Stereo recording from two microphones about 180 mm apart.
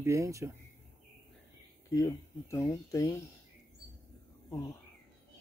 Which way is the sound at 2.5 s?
15° left (ahead or behind).